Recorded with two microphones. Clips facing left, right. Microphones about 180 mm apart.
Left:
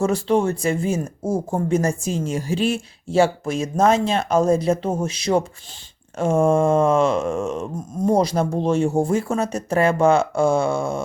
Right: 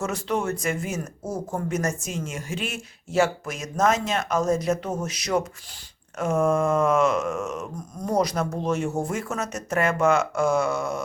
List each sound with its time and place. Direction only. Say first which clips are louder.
0.0 s speech: left 7 dB; 30° left (ahead or behind)